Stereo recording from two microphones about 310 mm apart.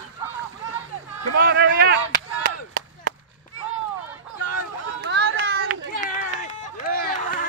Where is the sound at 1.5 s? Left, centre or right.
Right.